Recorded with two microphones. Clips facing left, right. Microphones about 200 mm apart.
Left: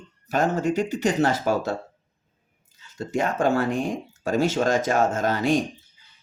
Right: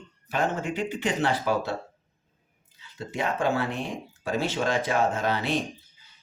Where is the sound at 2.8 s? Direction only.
45° left (ahead or behind).